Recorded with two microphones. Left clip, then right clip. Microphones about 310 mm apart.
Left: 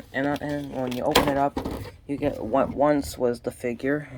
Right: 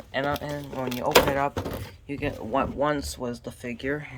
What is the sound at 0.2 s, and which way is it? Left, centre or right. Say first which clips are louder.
Speech: left 1 dB; right.